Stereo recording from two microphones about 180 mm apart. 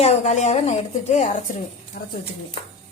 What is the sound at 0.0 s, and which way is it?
A woman's voice, 40° left (ahead or behind).